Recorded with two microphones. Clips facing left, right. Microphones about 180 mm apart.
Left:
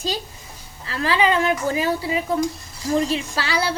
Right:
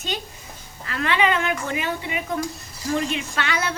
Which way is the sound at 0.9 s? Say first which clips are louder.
Left 2 dB; 30° left (ahead or behind).